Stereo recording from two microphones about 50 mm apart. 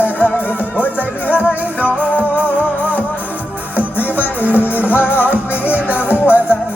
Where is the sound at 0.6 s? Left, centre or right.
Right.